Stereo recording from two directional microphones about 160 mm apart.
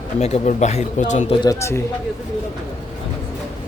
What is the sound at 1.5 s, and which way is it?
Speech, 15° left (ahead or behind).